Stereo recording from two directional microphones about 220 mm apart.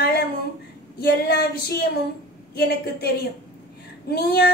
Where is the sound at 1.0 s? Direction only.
45° left (ahead or behind).